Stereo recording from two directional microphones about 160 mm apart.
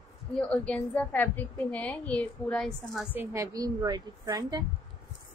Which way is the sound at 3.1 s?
15° right (ahead or behind).